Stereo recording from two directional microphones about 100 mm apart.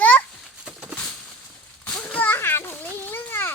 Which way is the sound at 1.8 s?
10° left (ahead or behind).